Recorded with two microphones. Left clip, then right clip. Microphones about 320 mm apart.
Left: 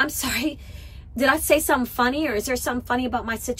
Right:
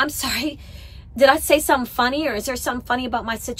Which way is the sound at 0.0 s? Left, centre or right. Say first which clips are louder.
Right 1 dB; centre.